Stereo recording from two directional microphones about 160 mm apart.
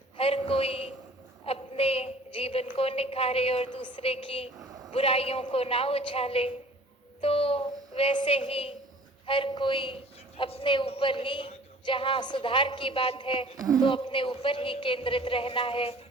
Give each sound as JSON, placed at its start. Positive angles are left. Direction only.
{"t": 0.2, "sound": "a sound", "side_deg": 35}
{"t": 1.5, "sound": "a woman's voice", "side_deg": 35}
{"t": 13.6, "sound": "speech", "side_deg": -20}
{"t": 13.8, "sound": "a woman's voice", "side_deg": 30}